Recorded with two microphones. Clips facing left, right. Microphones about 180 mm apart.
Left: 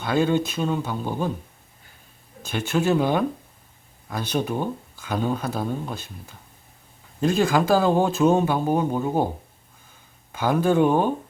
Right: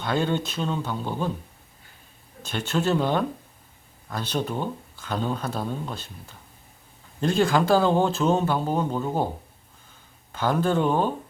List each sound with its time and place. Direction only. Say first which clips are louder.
0.0 s speech: left 4 dB; 5° left (ahead or behind)
2.4 s speech: left 2 dB; 10° left (ahead or behind)
7.2 s speech: left 1 dB; 5° left (ahead or behind)
10.3 s speech: left 3 dB; 10° left (ahead or behind)